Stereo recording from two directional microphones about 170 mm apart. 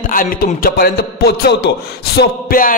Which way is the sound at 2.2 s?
60° left (ahead or behind).